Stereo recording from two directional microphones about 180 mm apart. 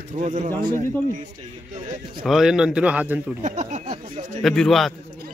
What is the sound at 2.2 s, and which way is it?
Speech, centre (ahead or behind).